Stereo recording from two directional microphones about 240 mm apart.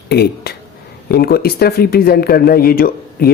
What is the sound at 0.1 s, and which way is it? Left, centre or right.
Speech, left.